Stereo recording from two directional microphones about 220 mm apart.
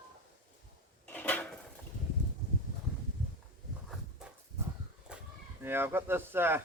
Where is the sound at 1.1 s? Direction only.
10° left (ahead or behind).